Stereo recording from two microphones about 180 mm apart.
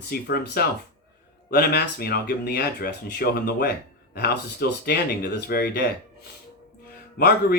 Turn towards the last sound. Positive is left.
turn(degrees=60)  # may be behind; listen again after turning